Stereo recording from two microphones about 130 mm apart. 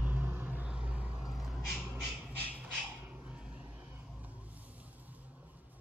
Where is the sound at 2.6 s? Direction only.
10° right (ahead or behind).